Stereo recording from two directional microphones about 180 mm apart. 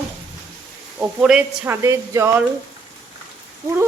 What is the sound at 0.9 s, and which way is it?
Speech, 5° right (ahead or behind).